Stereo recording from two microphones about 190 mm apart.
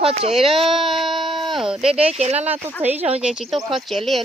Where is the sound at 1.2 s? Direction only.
25° right (ahead or behind).